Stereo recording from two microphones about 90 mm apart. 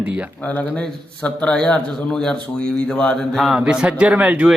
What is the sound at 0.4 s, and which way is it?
A man's voice, 20° left (ahead or behind).